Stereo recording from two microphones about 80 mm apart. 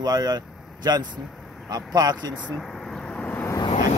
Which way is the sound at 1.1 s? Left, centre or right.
Centre.